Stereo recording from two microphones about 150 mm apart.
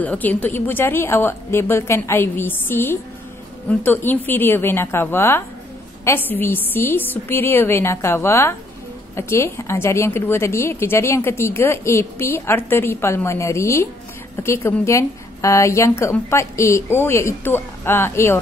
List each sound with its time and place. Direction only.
0.0 s a woman's voice: 10° left (ahead or behind)